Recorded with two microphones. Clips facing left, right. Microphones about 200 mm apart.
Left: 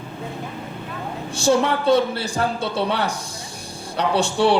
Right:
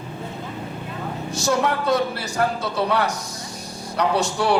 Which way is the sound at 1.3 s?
30° left (ahead or behind).